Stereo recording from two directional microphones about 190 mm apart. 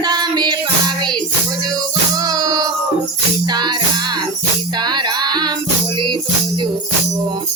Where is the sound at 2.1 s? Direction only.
20° right (ahead or behind).